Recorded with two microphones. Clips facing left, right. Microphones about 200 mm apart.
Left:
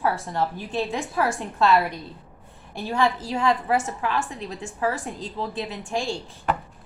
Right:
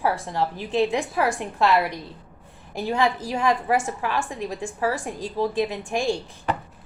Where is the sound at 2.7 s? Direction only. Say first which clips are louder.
Right 1 dB; 20° right (ahead or behind).